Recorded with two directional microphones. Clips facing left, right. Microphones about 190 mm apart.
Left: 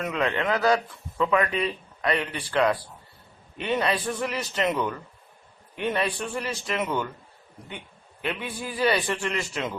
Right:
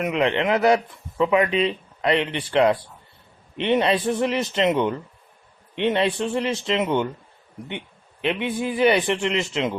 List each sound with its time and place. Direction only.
0.0 s speech: 20° right (ahead or behind)
8.2 s speech: 20° right (ahead or behind)